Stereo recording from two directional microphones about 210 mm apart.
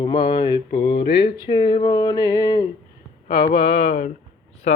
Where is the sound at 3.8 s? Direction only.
35° left (ahead or behind).